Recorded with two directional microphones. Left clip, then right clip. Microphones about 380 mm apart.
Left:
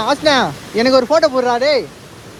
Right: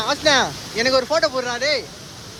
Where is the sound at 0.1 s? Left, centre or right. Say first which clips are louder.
Left 3 dB; centre.